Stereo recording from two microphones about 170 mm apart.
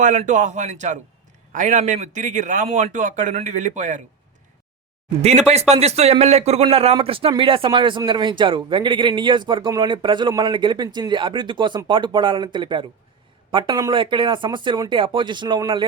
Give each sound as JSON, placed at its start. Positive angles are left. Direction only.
{"t": 0.0, "sound": "a man's voice", "side_deg": -45}
{"t": 5.2, "sound": "speech", "side_deg": -40}